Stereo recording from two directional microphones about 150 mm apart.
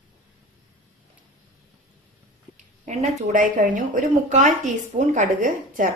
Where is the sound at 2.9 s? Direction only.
50° right (ahead or behind).